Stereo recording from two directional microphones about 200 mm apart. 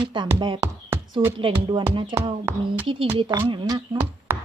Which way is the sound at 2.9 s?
25° right (ahead or behind).